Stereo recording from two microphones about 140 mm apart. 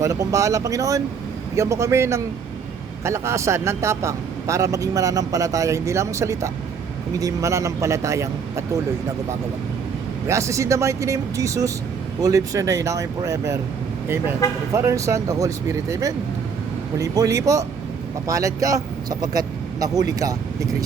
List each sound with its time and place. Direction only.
0.0 s speech: 25° right (ahead or behind)
10.2 s speech: 20° right (ahead or behind)
14.7 s speech: 20° right (ahead or behind)